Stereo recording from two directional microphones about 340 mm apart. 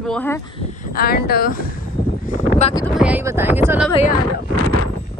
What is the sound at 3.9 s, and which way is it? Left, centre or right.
Speech, centre.